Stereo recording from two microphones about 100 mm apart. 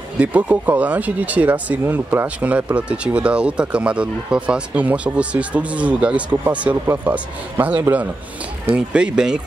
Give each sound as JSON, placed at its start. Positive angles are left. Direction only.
{"t": 0.2, "sound": "speech", "side_deg": -15}